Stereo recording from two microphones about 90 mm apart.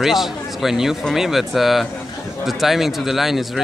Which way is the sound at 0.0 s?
Centre (ahead or behind).